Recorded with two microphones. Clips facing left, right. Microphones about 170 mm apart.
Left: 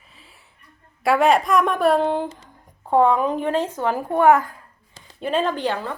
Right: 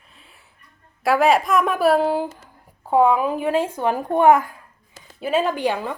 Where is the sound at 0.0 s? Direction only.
Centre (ahead or behind).